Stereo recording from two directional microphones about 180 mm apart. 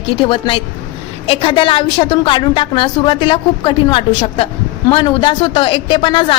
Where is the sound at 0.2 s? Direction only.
25° left (ahead or behind).